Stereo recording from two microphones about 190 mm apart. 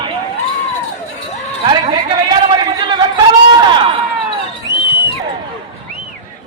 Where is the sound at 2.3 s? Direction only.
20° right (ahead or behind).